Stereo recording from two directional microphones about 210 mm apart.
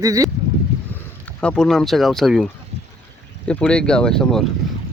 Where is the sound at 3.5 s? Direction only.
5° left (ahead or behind).